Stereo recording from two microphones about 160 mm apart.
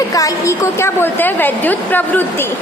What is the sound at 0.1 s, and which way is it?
A woman's voice, 20° left (ahead or behind).